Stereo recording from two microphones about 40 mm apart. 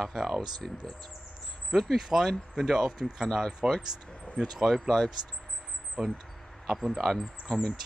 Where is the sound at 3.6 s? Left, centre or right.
Centre.